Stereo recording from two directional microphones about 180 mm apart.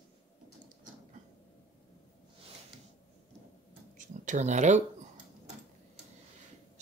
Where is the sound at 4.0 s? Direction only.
40° right (ahead or behind).